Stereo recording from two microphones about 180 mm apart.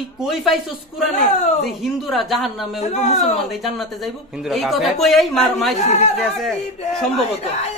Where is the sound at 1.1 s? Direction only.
40° left (ahead or behind).